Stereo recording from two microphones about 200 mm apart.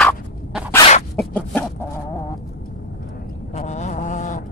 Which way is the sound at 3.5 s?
35° left (ahead or behind).